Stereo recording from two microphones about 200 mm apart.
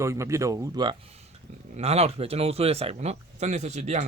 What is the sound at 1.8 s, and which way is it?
Speech, 30° right (ahead or behind).